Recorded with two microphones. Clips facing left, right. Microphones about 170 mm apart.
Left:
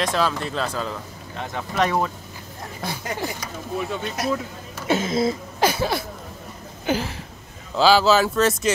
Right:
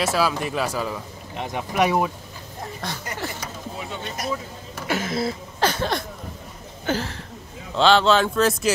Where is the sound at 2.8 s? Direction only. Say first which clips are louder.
Left 4 dB; 10° left (ahead or behind).